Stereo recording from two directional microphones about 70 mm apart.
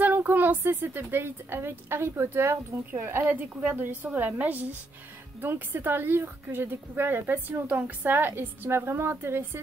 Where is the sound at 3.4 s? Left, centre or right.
Right.